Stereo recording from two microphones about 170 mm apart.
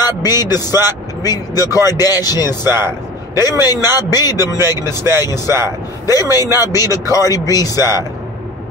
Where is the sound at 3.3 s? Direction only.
20° left (ahead or behind).